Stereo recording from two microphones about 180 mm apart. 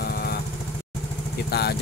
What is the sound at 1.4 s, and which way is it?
Speech, 60° left (ahead or behind).